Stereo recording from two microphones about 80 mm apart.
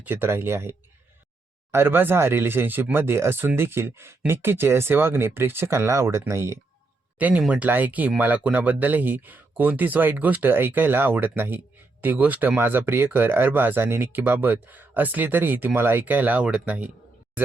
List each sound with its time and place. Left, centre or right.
0.0 s speech: right
7.2 s speech: centre